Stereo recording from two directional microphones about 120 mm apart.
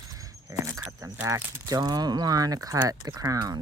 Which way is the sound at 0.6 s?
25° right (ahead or behind).